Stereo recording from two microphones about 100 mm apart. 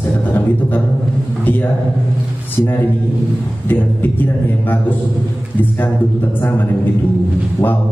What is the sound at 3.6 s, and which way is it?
A man's voice, 20° left (ahead or behind).